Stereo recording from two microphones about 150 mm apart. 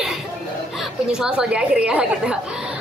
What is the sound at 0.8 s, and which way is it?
Speech, 5° right (ahead or behind).